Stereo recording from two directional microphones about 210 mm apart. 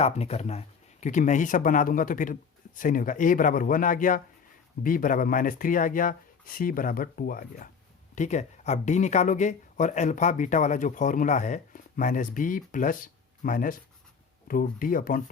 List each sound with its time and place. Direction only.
0.0 s speech: 30° left (ahead or behind)